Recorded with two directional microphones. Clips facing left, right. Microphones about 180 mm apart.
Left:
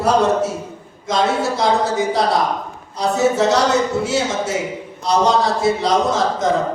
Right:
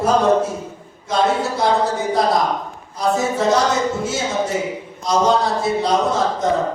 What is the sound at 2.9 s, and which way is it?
Speech, 70° left (ahead or behind).